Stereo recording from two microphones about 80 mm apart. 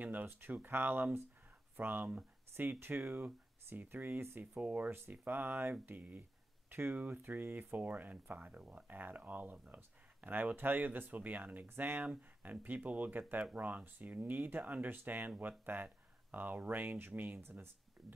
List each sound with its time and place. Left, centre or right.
0.0 s speech: right